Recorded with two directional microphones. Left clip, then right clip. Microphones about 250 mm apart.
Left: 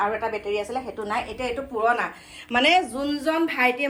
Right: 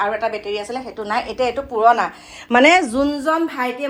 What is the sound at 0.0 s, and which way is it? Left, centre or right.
A woman's voice, centre.